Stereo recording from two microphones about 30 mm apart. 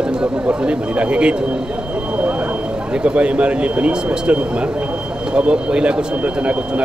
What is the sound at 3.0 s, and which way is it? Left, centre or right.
Speech, right.